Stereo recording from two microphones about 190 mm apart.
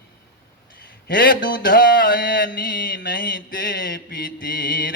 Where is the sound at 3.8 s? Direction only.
50° left (ahead or behind).